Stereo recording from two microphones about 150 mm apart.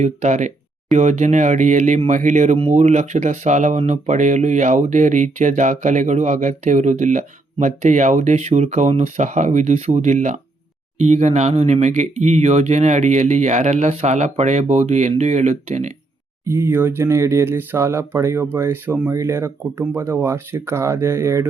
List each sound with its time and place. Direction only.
0.0 s speech: 50° right (ahead or behind)
16.5 s speech: 15° right (ahead or behind)